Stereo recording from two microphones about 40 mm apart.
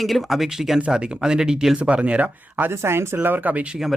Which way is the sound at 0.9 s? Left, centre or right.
Right.